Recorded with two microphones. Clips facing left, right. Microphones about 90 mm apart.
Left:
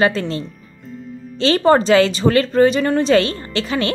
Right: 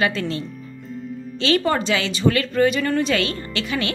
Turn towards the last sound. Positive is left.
turn(degrees=35)  # may be behind; listen again after turning